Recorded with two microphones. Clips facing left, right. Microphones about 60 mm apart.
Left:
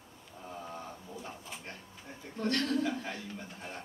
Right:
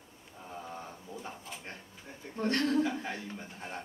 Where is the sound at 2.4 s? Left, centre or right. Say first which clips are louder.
Right 2 dB; right.